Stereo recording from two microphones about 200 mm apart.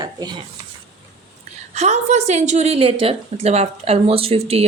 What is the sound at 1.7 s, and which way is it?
A woman's voice, 35° right (ahead or behind).